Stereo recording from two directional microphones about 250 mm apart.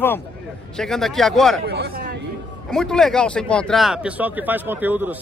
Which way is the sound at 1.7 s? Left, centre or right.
Right.